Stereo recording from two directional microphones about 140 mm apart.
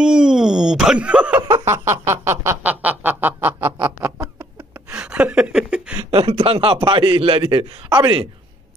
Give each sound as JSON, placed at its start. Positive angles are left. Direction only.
{"t": 0.0, "sound": "speech", "side_deg": -5}
{"t": 1.7, "sound": "a sound", "side_deg": -20}
{"t": 6.0, "sound": "a man's voice", "side_deg": -40}